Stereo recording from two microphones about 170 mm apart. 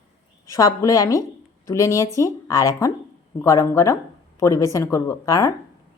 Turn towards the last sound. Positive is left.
turn(degrees=15)  # may be behind; listen again after turning